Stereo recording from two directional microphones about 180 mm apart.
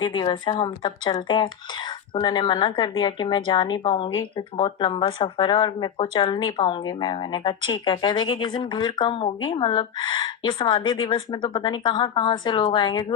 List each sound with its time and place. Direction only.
0.0 s speech: 25° left (ahead or behind)